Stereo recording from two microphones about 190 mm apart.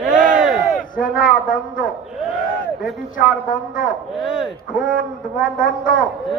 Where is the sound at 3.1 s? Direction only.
45° left (ahead or behind).